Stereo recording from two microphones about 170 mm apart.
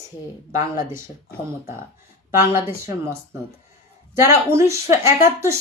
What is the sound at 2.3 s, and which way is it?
Speech, 15° right (ahead or behind).